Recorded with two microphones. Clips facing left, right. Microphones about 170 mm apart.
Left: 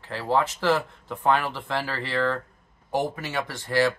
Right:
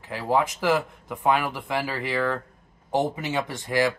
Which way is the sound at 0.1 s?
15° right (ahead or behind).